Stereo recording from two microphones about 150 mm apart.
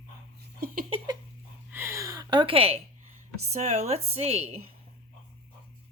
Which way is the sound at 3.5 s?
50° right (ahead or behind).